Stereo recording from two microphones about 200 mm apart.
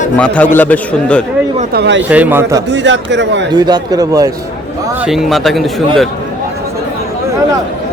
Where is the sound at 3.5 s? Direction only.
20° right (ahead or behind).